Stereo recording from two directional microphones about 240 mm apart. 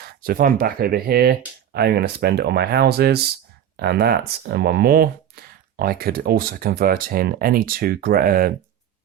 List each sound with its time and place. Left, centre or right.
0.0 s speech: right